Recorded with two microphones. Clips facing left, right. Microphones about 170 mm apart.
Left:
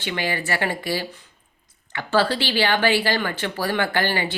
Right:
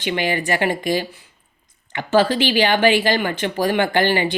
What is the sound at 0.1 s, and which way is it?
Speech, 20° right (ahead or behind).